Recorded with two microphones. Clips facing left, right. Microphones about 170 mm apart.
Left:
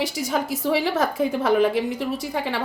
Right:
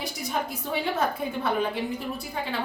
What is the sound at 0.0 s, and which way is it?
A woman's voice, 90° left.